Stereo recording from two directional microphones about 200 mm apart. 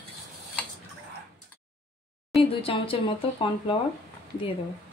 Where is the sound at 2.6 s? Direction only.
25° left (ahead or behind).